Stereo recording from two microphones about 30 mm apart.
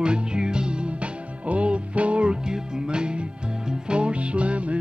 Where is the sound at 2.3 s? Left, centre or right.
Right.